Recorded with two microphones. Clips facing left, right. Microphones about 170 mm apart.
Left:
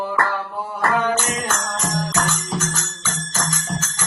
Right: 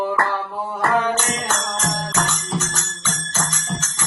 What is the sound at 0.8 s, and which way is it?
Music, centre (ahead or behind).